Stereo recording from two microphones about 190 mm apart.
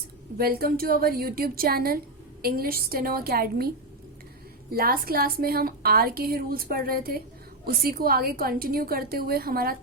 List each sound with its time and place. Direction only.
0.3 s a woman's voice: 50° right (ahead or behind)
4.7 s a woman's voice: 50° right (ahead or behind)